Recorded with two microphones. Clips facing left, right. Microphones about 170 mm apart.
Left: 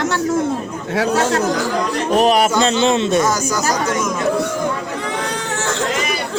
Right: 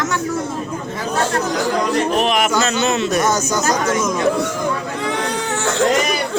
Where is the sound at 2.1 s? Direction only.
40° left (ahead or behind).